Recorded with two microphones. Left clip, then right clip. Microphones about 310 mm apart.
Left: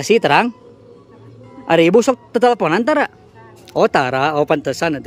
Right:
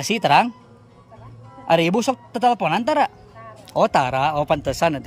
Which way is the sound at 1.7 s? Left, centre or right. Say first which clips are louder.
Left 6 dB; centre.